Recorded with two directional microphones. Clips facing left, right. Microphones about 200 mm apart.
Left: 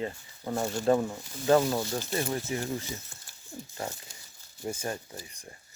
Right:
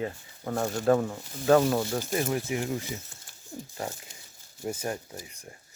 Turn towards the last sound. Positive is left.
turn(degrees=-10)  # may be behind; listen again after turning